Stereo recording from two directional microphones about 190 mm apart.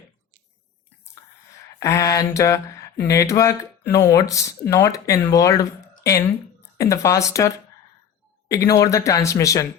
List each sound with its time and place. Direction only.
1.8 s speech: 15° left (ahead or behind)
8.5 s speech: 15° left (ahead or behind)